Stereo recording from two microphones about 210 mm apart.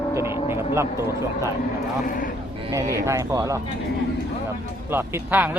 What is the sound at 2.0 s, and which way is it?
Speech, 40° left (ahead or behind).